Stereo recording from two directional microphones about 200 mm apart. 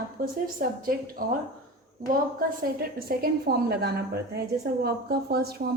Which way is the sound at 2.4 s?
50° right (ahead or behind).